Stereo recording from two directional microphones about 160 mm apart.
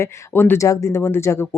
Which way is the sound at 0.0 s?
15° left (ahead or behind).